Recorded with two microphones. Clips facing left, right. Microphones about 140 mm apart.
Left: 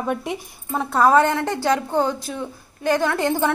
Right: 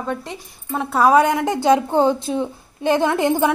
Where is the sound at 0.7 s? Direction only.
5° right (ahead or behind).